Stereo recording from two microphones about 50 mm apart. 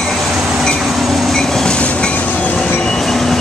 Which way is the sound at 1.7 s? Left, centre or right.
Left.